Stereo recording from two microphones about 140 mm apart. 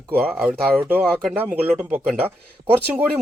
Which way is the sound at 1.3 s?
15° right (ahead or behind).